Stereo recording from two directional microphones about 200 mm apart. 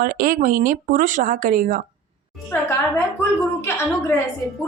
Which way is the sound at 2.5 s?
10° left (ahead or behind).